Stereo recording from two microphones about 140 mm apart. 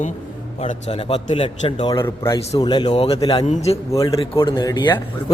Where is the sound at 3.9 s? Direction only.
25° left (ahead or behind).